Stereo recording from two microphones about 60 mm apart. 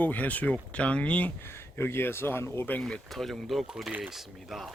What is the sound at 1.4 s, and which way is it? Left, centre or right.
Speech, left.